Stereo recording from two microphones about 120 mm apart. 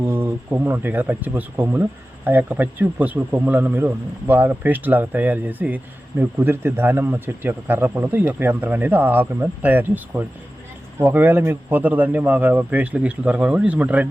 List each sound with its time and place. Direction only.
0.0 s speech: 20° right (ahead or behind)